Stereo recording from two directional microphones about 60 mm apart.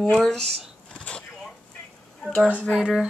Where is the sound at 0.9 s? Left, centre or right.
Centre.